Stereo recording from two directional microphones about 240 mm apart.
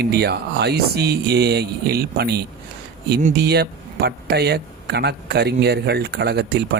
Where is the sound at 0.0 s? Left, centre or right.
Right.